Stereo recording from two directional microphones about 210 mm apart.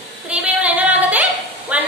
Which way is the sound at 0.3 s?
5° right (ahead or behind).